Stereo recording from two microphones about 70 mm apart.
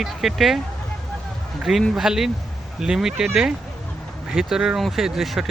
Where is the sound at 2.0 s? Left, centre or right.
Centre.